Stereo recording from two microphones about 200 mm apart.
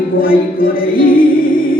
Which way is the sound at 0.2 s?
45° left (ahead or behind).